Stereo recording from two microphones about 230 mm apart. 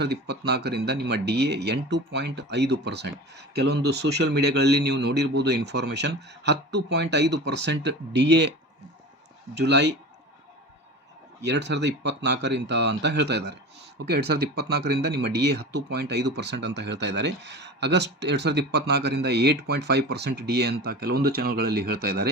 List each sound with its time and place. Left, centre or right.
0.0 s speech: right
9.6 s speech: right
11.4 s speech: right